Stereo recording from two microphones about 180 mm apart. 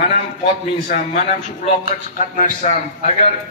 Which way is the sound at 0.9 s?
45° left (ahead or behind).